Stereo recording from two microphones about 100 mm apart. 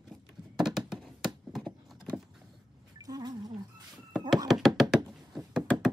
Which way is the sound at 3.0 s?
40° right (ahead or behind).